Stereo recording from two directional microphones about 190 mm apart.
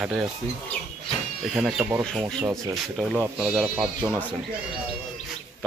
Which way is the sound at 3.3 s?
5° right (ahead or behind).